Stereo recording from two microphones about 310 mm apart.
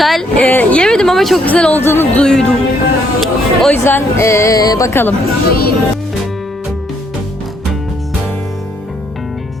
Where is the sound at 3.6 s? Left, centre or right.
Centre.